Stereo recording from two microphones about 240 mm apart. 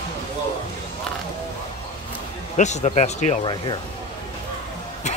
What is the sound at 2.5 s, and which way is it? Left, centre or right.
Speech, left.